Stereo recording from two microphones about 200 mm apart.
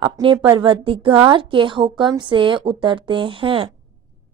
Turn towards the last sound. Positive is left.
turn(degrees=-25)  # may be behind; listen again after turning